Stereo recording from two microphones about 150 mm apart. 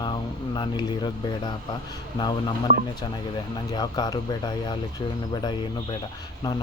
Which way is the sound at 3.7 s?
25° left (ahead or behind).